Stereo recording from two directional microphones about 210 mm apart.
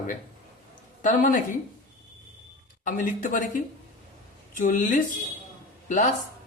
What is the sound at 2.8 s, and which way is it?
Speech, 40° left (ahead or behind).